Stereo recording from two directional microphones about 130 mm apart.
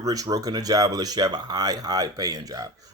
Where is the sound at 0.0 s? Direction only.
30° right (ahead or behind).